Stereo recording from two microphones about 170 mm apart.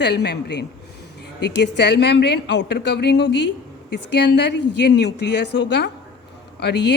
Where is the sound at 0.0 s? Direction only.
80° left.